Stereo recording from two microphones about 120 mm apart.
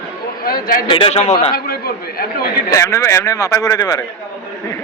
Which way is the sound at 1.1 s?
65° left (ahead or behind).